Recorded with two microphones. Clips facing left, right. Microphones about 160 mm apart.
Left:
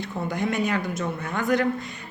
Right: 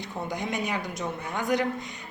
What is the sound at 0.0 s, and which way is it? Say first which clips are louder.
A woman's voice: left 5 dB; 15° right (ahead or behind).